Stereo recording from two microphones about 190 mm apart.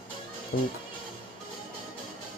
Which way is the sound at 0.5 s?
50° left (ahead or behind).